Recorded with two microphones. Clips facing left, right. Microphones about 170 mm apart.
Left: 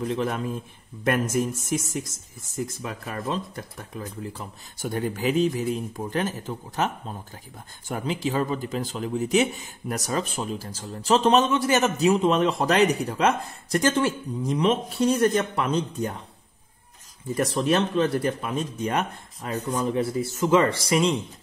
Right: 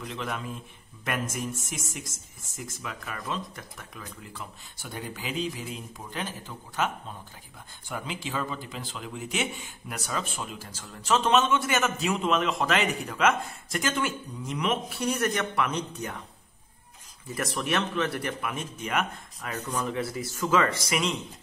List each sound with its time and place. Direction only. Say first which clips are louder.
1.0 s speech: left 8 dB; 40° left (ahead or behind)
2.8 s speech: left 6 dB; 35° left (ahead or behind)
17.3 s speech: left 7 dB; 30° left (ahead or behind)
19.5 s speech: left 5 dB; 15° left (ahead or behind)
19.8 s speech: left 6 dB; 30° left (ahead or behind)